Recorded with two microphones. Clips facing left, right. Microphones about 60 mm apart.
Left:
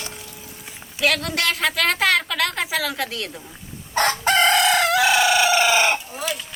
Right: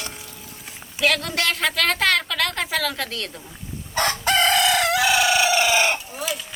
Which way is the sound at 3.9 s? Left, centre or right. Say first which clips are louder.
Left 2 dB; left.